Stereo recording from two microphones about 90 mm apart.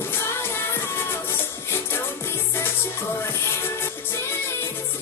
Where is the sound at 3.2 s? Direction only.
30° left (ahead or behind).